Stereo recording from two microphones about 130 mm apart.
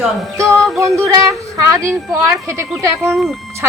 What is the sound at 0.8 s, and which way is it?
Speech, 25° right (ahead or behind).